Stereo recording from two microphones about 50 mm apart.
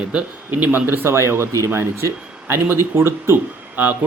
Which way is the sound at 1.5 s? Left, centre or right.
Right.